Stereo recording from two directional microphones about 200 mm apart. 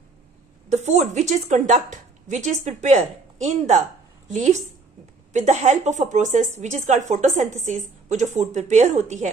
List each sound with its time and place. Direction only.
0.7 s speech: 35° right (ahead or behind)